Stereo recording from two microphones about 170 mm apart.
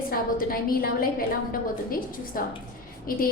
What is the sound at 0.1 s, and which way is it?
Speech, 55° left (ahead or behind).